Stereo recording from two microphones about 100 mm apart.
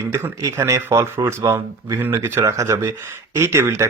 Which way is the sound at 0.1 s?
25° right (ahead or behind).